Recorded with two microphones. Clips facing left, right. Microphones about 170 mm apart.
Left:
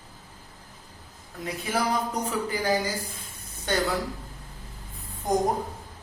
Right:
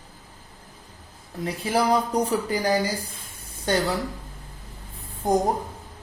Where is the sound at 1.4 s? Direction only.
30° right (ahead or behind).